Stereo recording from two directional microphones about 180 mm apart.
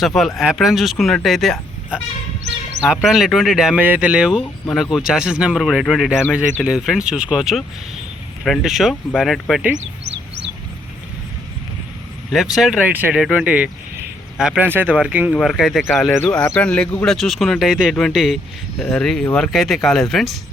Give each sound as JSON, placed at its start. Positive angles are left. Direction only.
{"t": 0.0, "sound": "speech", "side_deg": 0}
{"t": 2.8, "sound": "speech", "side_deg": 0}
{"t": 9.7, "sound": "a sound", "side_deg": -75}
{"t": 12.3, "sound": "speech", "side_deg": 0}